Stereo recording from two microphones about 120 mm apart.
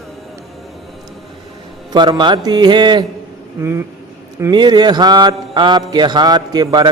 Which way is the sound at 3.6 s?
20° right (ahead or behind).